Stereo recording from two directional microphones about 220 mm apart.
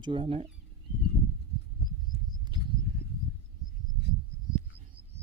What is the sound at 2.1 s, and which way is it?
Wild animals, 40° left (ahead or behind).